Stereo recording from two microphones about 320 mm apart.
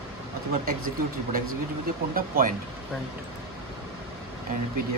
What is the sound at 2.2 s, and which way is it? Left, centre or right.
Speech, right.